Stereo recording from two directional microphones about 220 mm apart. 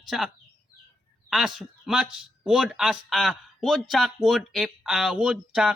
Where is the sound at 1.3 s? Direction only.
Centre (ahead or behind).